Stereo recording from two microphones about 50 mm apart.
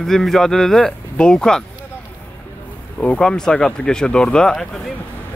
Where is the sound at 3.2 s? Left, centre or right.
Centre.